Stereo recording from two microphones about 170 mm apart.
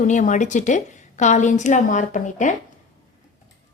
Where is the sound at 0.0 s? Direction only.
45° left (ahead or behind).